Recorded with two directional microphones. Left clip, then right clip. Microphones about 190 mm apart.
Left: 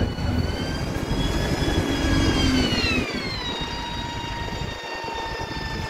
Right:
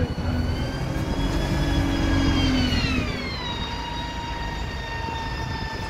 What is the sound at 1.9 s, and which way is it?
Music, 55° left (ahead or behind).